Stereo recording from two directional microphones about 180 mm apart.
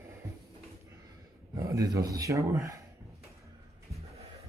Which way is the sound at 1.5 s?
20° right (ahead or behind).